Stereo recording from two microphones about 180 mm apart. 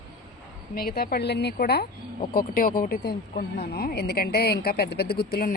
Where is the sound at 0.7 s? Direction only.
60° left (ahead or behind).